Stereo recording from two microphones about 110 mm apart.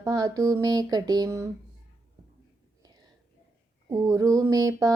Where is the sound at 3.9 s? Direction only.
30° right (ahead or behind).